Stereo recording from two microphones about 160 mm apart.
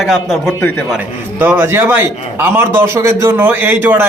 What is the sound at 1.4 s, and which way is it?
Speech, 15° right (ahead or behind).